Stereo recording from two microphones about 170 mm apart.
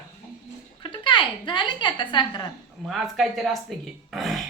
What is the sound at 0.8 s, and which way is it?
A woman's voice, 30° left (ahead or behind).